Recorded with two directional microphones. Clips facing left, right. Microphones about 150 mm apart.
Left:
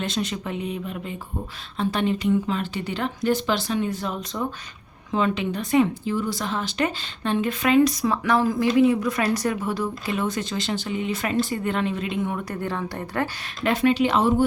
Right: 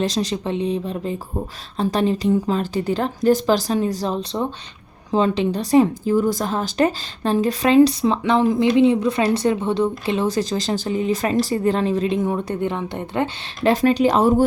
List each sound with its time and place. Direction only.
0.0 s speech: 35° right (ahead or behind)
13.7 s speech: 40° right (ahead or behind)